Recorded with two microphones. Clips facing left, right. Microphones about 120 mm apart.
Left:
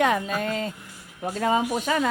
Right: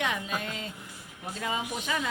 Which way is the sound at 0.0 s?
45° left (ahead or behind).